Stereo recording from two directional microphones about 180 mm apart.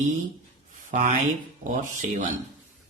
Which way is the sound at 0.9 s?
45° right (ahead or behind).